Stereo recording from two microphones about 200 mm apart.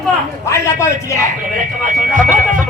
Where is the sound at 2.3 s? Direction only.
40° right (ahead or behind).